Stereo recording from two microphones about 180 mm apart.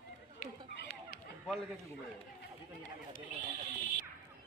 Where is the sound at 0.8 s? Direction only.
60° left (ahead or behind).